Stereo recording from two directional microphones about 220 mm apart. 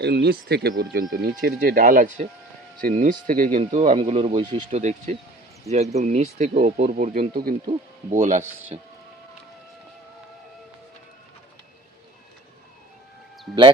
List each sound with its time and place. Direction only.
0.0 s speech: 50° right (ahead or behind); by 8.9 s 25° right (ahead or behind)